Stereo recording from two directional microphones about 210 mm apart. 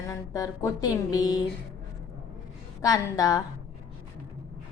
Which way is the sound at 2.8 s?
15° left (ahead or behind).